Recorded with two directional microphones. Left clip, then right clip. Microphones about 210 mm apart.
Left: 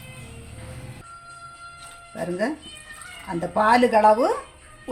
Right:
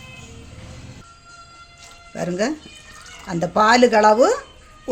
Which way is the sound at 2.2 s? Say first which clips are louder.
Right 3 dB; 40° right (ahead or behind).